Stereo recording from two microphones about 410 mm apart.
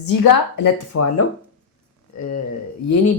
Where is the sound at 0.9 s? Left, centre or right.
Left.